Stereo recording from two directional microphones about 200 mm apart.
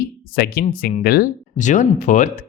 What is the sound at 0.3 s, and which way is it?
Speech, 50° left (ahead or behind).